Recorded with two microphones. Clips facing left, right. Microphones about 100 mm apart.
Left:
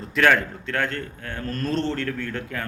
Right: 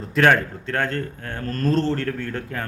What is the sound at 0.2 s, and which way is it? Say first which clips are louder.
A man's voice: right 2 dB; 35° right (ahead or behind).